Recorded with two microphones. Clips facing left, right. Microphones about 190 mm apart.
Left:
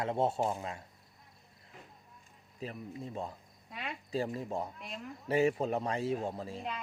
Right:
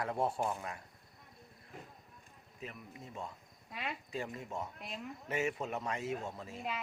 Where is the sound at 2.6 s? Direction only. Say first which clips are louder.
Left 7 dB; 35° left (ahead or behind).